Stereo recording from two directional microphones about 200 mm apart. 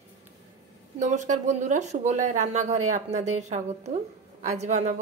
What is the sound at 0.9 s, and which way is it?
A woman's voice, 35° right (ahead or behind).